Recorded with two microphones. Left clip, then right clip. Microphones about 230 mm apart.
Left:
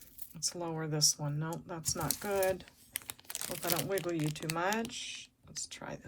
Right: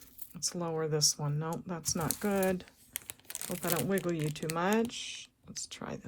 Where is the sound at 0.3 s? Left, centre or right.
Right.